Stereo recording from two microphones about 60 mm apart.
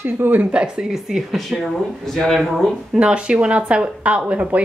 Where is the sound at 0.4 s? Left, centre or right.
Centre.